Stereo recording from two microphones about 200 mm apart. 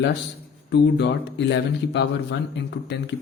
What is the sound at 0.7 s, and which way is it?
Speech, 60° left (ahead or behind).